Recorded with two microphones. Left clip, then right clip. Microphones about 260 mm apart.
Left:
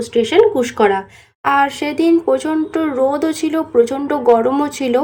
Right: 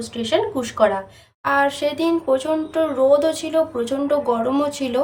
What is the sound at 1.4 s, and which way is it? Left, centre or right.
A woman's voice, centre.